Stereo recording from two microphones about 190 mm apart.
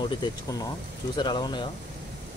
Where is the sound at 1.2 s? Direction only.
25° left (ahead or behind).